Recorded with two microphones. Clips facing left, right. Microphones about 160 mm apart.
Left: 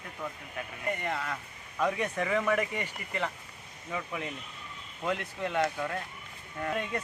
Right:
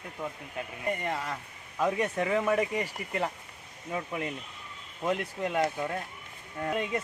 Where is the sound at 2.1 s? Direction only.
10° right (ahead or behind).